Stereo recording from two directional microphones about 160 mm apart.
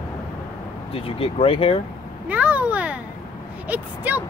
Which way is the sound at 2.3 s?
10° right (ahead or behind).